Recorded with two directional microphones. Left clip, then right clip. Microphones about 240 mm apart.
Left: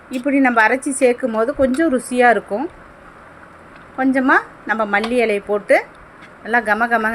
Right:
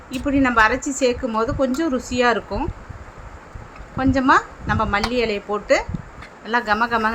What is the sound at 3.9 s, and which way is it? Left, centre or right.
A woman's voice, centre.